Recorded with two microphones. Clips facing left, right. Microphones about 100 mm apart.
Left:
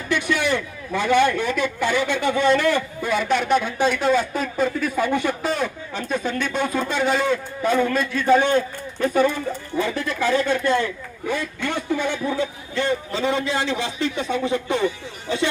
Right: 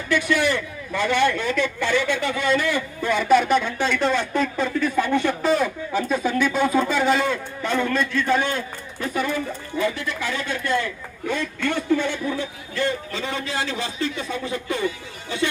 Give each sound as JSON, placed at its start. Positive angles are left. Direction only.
{"t": 0.1, "sound": "a man's voice", "side_deg": 20}
{"t": 2.5, "sound": "speech", "side_deg": 45}
{"t": 3.0, "sound": "a man's voice", "side_deg": 0}
{"t": 5.5, "sound": "speech", "side_deg": 0}
{"t": 8.3, "sound": "speech", "side_deg": 25}
{"t": 11.3, "sound": "speech", "side_deg": 10}